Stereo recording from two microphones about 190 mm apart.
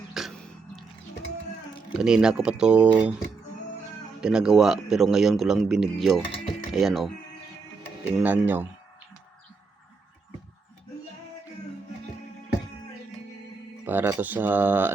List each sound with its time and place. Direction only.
0.1 s a sound: centre (ahead or behind)
1.9 s speech: 5° right (ahead or behind)
4.2 s speech: 5° right (ahead or behind)
8.2 s speech: 10° right (ahead or behind)
13.8 s speech: 10° right (ahead or behind)